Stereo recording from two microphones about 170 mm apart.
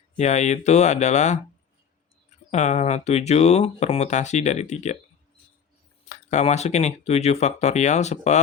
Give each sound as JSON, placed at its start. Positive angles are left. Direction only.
{"t": 0.2, "sound": "speech", "side_deg": 40}
{"t": 2.5, "sound": "speech", "side_deg": 45}
{"t": 6.1, "sound": "speech", "side_deg": 40}